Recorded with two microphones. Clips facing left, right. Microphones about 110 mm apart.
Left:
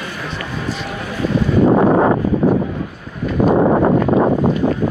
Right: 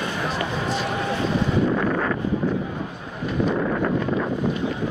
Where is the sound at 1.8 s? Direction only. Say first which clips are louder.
Left 10 dB; 45° left (ahead or behind).